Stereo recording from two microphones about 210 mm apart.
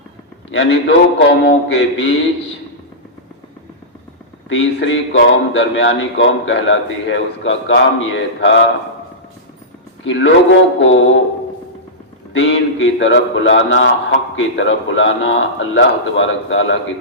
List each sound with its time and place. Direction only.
0.5 s a man's voice: 60° left (ahead or behind)
4.4 s a man's voice: 60° left (ahead or behind)
10.0 s a man's voice: 60° left (ahead or behind)
12.3 s a man's voice: 65° left (ahead or behind)